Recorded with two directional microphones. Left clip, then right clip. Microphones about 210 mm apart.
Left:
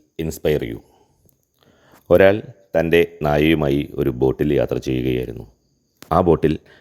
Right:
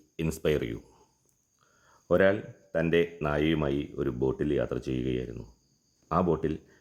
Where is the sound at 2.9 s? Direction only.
30° left (ahead or behind).